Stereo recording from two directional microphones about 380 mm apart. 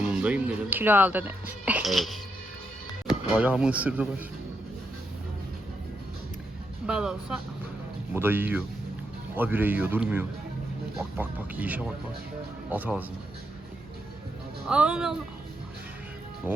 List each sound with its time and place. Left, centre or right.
0.1 s speech: centre
6.8 s speech: centre
14.7 s speech: centre